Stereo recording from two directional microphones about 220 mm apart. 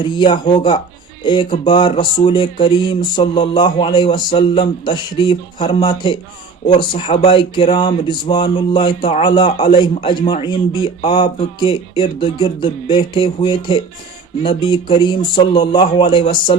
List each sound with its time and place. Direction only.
0.0 s speech: 20° left (ahead or behind)